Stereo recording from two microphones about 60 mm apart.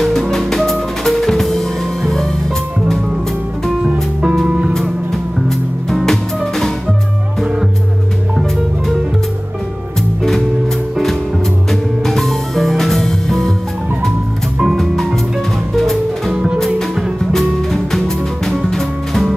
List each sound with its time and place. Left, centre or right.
0.0 s drum kit: centre
3.8 s music: centre
4.7 s music: centre
12.1 s music: centre
15.7 s music: centre
16.3 s music: centre
16.5 s music: centre